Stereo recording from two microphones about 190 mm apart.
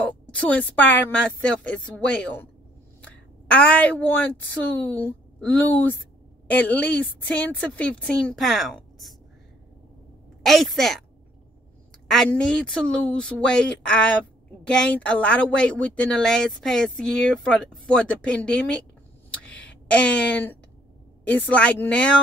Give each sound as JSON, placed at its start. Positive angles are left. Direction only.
{"t": 0.0, "sound": "a woman's voice", "side_deg": 5}
{"t": 3.0, "sound": "a sound", "side_deg": 5}
{"t": 4.9, "sound": "a woman's voice", "side_deg": 10}
{"t": 10.4, "sound": "speech", "side_deg": 0}
{"t": 12.1, "sound": "speech", "side_deg": 5}
{"t": 19.3, "sound": "a sound", "side_deg": 5}
{"t": 21.2, "sound": "a woman's voice", "side_deg": 10}